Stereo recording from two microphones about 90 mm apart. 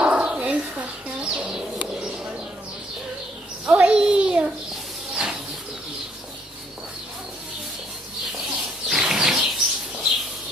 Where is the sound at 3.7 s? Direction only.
15° right (ahead or behind).